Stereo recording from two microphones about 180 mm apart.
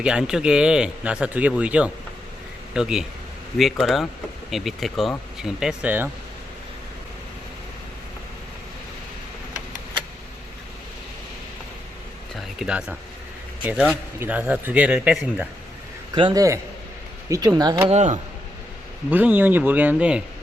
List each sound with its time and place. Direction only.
0.0 s a man's voice: 5° right (ahead or behind)
12.4 s speech: 5° right (ahead or behind)
16.1 s speech: 25° right (ahead or behind)
17.9 s speech: 40° right (ahead or behind)
19.1 s speech: 10° right (ahead or behind)